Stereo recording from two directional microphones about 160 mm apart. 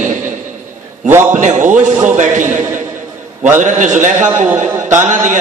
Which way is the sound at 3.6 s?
50° right (ahead or behind).